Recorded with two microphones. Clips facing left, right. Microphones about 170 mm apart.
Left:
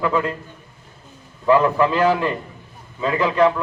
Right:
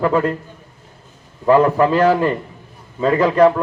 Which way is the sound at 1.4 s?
40° right (ahead or behind).